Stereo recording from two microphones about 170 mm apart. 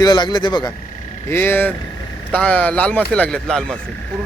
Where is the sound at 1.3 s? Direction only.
10° left (ahead or behind).